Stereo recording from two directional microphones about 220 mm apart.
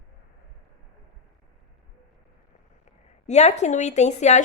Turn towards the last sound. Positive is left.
turn(degrees=30)  # may be behind; listen again after turning